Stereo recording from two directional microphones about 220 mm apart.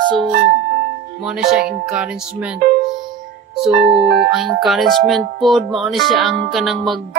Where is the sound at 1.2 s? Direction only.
Centre (ahead or behind).